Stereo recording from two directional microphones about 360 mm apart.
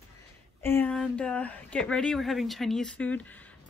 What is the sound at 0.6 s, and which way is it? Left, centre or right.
Speech, centre.